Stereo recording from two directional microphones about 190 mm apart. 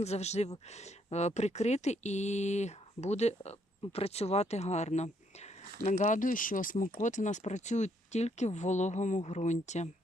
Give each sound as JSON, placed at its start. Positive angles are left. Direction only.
{"t": 0.0, "sound": "speech", "side_deg": 35}